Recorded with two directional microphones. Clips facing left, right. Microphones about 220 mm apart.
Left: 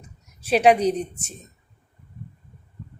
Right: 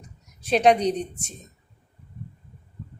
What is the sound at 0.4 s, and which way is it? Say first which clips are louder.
Speech: left 2 dB; 5° left (ahead or behind).